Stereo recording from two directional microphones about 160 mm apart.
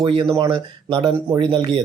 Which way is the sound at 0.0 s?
30° right (ahead or behind).